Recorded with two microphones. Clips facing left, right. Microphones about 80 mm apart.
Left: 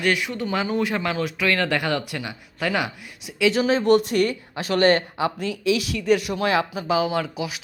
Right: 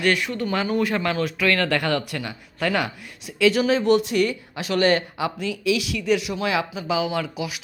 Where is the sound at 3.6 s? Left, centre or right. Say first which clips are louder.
Left 1 dB; left.